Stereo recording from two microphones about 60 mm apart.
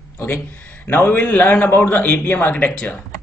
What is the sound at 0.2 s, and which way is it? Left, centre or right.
A man's voice, left.